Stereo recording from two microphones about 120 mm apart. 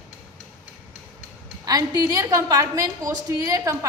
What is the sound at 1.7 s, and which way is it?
A woman's voice, 30° right (ahead or behind).